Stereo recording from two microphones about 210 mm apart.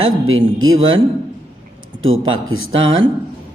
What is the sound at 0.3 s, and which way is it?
Mantra, 70° right (ahead or behind).